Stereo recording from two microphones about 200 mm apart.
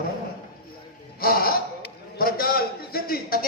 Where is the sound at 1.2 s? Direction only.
50° left (ahead or behind).